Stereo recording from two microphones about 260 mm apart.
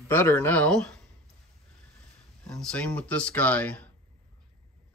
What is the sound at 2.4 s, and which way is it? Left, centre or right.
Speech, centre.